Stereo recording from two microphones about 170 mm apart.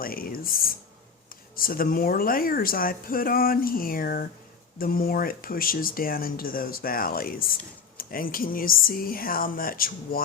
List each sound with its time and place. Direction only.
0.0 s speech: 60° left (ahead or behind)